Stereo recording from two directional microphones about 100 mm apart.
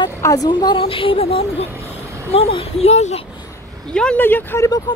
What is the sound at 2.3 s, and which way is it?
Speech, 90° left.